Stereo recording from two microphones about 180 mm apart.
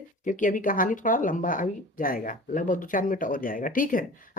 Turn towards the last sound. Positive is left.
turn(degrees=50)  # may be behind; listen again after turning